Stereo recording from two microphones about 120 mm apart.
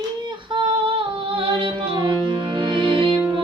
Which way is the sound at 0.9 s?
45° right (ahead or behind).